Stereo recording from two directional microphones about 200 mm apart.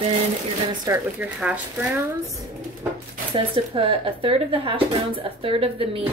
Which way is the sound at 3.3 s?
25° right (ahead or behind).